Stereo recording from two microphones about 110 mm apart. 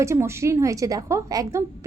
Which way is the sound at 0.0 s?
25° right (ahead or behind).